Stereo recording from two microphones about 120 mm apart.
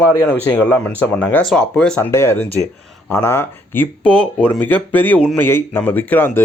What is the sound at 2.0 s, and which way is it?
Speech, 25° left (ahead or behind).